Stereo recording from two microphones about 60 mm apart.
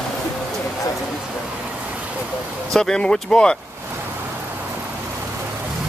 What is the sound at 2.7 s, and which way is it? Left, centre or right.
Speech, centre.